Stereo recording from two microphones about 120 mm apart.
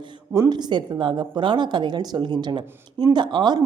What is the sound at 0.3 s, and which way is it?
A woman's voice, 35° right (ahead or behind).